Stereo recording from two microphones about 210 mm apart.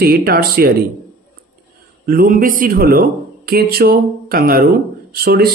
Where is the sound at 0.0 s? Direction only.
45° right (ahead or behind).